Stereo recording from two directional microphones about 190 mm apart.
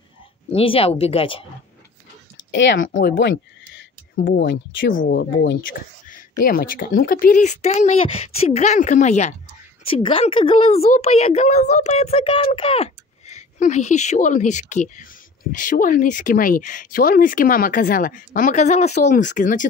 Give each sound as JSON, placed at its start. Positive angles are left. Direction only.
{"t": 0.5, "sound": "a woman's voice", "side_deg": 30}
{"t": 2.5, "sound": "speech", "side_deg": 75}
{"t": 2.9, "sound": "speech", "side_deg": 45}
{"t": 3.2, "sound": "a sound", "side_deg": 65}
{"t": 4.5, "sound": "speech", "side_deg": 80}
{"t": 5.1, "sound": "speech", "side_deg": 65}
{"t": 6.4, "sound": "a woman's voice", "side_deg": 45}